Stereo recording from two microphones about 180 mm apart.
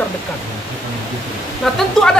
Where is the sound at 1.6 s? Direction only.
Centre (ahead or behind).